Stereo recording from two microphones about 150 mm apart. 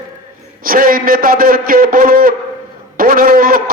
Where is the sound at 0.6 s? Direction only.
70° right (ahead or behind).